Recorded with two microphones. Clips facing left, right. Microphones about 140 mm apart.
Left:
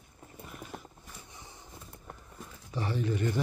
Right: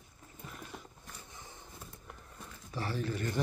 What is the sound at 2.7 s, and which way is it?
Speech, 15° left (ahead or behind).